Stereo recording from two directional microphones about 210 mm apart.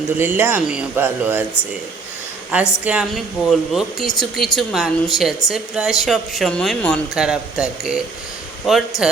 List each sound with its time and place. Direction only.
0.2 s speech: 10° right (ahead or behind)
2.5 s speech: 5° right (ahead or behind)